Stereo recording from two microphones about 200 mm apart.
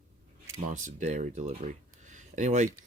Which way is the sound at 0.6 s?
40° right (ahead or behind).